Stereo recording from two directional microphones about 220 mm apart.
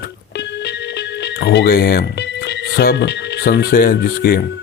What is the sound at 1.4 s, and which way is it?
Speech, 50° left (ahead or behind).